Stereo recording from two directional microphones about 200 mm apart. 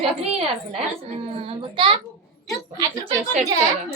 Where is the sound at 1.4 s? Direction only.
25° right (ahead or behind).